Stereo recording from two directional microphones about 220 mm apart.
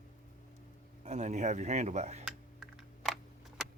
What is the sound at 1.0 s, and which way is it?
Speech, 30° right (ahead or behind).